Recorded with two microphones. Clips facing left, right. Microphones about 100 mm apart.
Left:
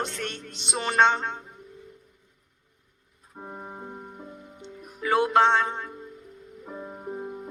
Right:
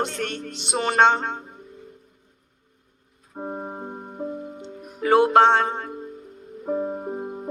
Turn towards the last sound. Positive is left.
turn(degrees=-25)  # may be behind; listen again after turning